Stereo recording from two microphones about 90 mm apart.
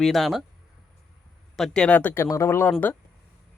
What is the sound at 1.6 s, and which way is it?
Speech, 10° left (ahead or behind).